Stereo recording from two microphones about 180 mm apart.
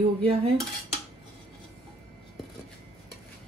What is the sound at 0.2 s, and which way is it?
Cutlery, 35° right (ahead or behind).